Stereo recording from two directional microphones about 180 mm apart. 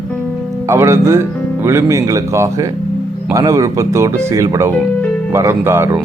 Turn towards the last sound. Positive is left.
turn(degrees=-15)  # may be behind; listen again after turning